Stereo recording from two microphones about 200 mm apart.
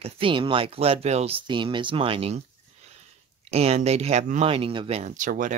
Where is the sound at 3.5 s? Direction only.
30° right (ahead or behind).